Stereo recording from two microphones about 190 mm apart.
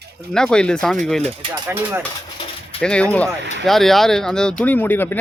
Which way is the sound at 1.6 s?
15° right (ahead or behind).